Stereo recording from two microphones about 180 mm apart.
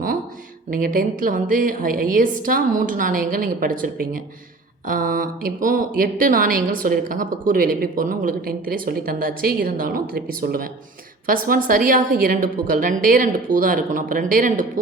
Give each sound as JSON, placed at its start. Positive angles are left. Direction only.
{"t": 0.7, "sound": "a woman's voice", "side_deg": -50}